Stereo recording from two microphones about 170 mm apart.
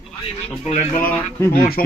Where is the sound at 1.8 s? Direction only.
60° left (ahead or behind).